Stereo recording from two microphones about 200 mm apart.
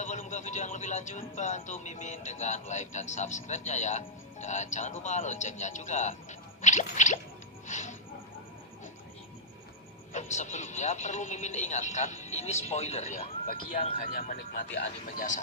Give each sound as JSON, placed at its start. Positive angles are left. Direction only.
{"t": 0.0, "sound": "speech", "side_deg": 35}
{"t": 6.6, "sound": "plop", "side_deg": 35}
{"t": 7.7, "sound": "a sound", "side_deg": 35}
{"t": 10.1, "sound": "speech", "side_deg": 35}